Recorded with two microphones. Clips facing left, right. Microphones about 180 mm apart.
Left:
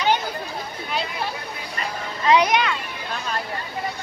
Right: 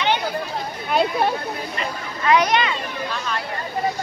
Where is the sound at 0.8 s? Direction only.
55° right (ahead or behind).